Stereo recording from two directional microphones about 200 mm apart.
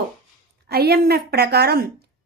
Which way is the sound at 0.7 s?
55° right (ahead or behind).